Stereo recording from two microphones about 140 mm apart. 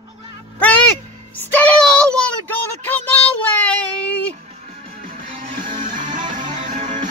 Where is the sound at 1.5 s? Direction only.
10° left (ahead or behind).